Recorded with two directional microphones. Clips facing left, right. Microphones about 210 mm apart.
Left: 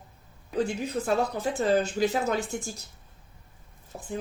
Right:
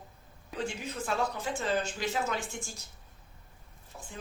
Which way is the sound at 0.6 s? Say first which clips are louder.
Left 7 dB; 40° left (ahead or behind).